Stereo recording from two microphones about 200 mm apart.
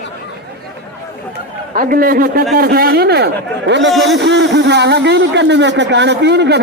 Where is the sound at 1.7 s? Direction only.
45° right (ahead or behind).